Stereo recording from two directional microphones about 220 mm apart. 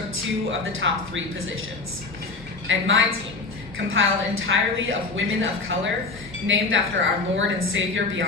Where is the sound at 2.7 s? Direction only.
60° right (ahead or behind).